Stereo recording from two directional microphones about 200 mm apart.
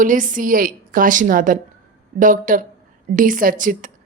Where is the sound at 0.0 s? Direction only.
40° right (ahead or behind).